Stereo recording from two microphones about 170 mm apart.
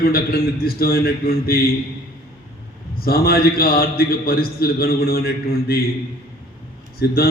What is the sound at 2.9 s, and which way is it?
A man's voice, 60° left (ahead or behind).